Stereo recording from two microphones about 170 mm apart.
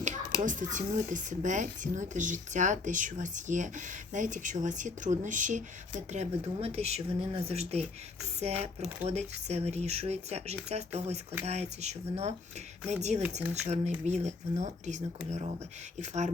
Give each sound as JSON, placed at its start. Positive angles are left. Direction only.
{"t": 0.4, "sound": "speech", "side_deg": -50}